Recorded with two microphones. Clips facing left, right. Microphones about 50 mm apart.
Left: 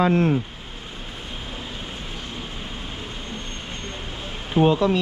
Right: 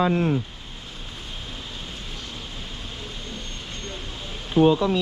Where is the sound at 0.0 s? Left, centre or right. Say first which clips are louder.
Left 3 dB; left.